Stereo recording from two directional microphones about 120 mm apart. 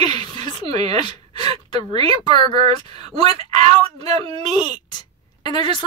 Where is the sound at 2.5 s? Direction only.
55° right (ahead or behind).